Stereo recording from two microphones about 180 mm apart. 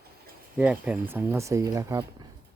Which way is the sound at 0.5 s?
5° right (ahead or behind).